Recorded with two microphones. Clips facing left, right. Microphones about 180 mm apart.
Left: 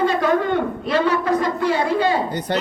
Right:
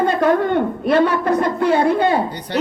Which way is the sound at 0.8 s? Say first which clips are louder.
Right 4 dB; 55° right (ahead or behind).